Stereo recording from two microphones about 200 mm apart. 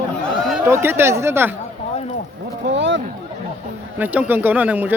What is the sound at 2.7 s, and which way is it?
Speech, 60° right (ahead or behind).